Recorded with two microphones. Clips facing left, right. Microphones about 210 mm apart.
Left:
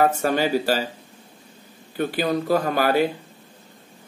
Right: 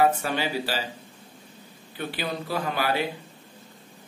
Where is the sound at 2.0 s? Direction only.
45° left (ahead or behind).